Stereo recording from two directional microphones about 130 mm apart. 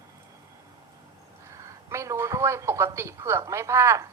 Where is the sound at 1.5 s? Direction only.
25° right (ahead or behind).